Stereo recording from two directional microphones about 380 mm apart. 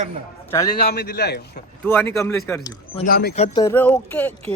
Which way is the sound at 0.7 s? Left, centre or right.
Left.